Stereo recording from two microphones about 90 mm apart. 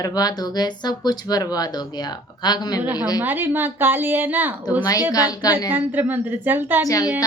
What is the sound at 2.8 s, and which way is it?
A woman's voice, 20° right (ahead or behind).